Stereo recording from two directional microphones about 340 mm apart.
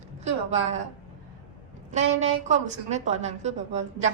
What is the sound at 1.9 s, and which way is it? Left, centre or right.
A woman's voice, centre.